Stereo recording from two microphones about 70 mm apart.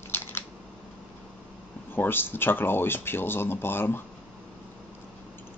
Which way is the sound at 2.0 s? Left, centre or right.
Left.